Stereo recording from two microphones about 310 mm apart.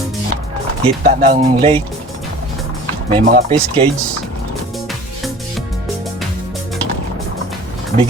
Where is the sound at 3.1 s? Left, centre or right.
Centre.